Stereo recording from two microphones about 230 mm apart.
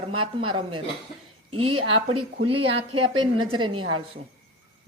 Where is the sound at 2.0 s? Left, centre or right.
Right.